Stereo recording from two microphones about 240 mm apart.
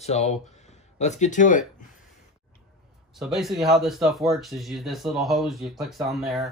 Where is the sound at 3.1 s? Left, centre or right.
Centre.